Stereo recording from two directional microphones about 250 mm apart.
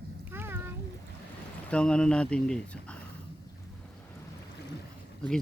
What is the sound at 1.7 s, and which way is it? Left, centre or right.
Speech, centre.